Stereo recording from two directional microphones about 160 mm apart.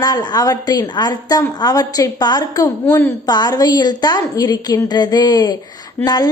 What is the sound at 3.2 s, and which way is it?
A woman's voice, 25° left (ahead or behind).